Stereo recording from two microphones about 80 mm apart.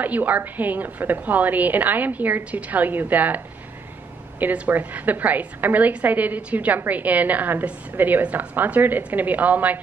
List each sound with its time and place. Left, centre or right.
0.0 s a woman's voice: right
4.4 s a woman's voice: right